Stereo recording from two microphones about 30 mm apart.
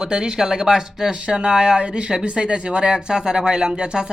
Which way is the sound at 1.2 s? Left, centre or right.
Right.